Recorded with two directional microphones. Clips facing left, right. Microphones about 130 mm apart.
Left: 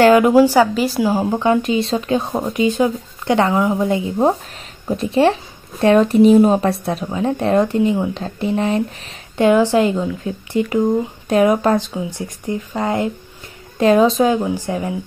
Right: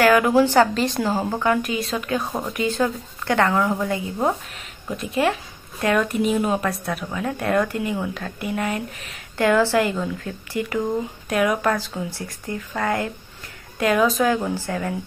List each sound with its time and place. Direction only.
0.0 s speech: 25° left (ahead or behind)
0.3 s speech: 10° left (ahead or behind)